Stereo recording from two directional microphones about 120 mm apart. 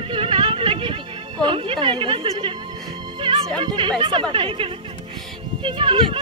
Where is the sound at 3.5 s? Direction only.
40° right (ahead or behind).